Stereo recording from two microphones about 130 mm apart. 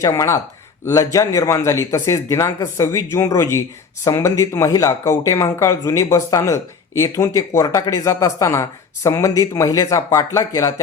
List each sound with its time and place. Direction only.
0.0 s speech: 25° left (ahead or behind)